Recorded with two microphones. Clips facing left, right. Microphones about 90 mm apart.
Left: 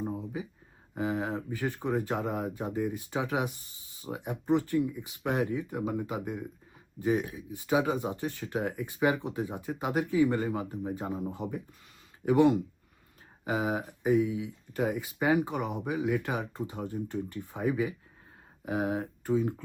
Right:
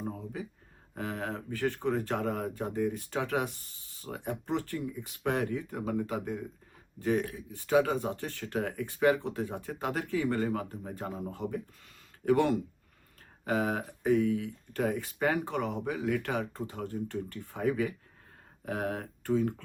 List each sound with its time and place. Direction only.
0.9 s speech: 15° left (ahead or behind)